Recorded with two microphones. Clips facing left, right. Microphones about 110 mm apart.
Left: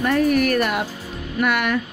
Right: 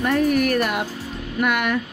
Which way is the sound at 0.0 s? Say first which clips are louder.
Left 1 dB; 15° right (ahead or behind).